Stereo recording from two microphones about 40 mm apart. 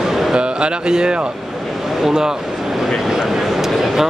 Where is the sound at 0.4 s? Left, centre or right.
Right.